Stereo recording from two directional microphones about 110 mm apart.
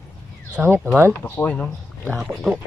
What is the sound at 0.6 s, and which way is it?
Speech, 10° right (ahead or behind).